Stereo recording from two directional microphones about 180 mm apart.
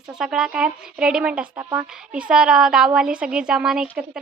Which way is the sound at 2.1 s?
5° right (ahead or behind).